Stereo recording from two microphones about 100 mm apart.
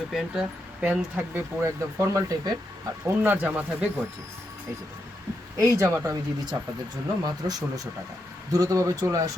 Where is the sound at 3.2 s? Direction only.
15° right (ahead or behind).